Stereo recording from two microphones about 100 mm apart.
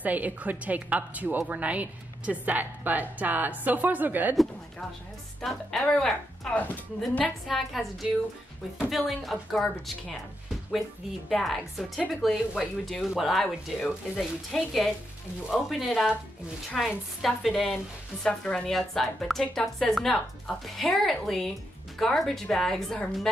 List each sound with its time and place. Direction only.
0.0 s a woman's voice: 15° right (ahead or behind)
5.4 s a woman's voice: 5° left (ahead or behind)
11.2 s a woman's voice: centre (ahead or behind)